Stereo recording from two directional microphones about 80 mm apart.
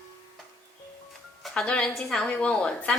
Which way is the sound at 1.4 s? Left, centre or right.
Centre.